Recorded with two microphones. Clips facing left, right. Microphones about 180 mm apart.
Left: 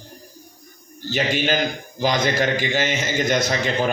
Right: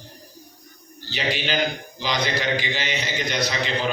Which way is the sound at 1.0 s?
50° left (ahead or behind).